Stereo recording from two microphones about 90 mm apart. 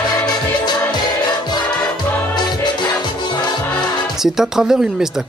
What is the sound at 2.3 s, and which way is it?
Music, 55° left (ahead or behind).